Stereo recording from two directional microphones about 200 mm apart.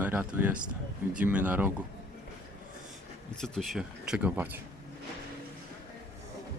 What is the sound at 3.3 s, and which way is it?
Speech, 5° left (ahead or behind).